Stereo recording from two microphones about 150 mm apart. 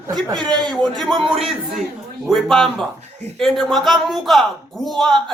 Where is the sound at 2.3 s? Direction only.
Centre (ahead or behind).